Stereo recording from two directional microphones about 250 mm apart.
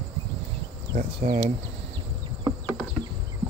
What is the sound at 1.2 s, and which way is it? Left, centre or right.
Speech, right.